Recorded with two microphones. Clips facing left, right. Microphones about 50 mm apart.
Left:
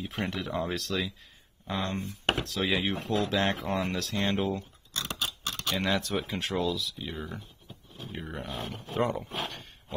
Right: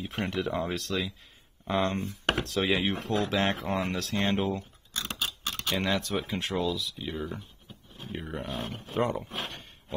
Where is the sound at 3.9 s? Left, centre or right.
Right.